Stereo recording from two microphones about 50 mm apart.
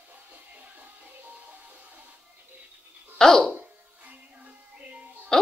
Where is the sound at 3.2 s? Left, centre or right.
Centre.